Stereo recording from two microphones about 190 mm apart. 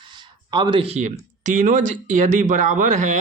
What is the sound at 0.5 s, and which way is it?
A man's voice, 25° right (ahead or behind).